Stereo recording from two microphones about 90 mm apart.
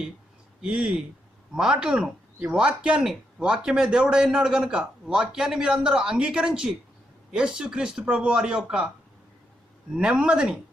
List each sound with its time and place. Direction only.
0.6 s speech: 10° right (ahead or behind)
9.9 s speech: 10° right (ahead or behind)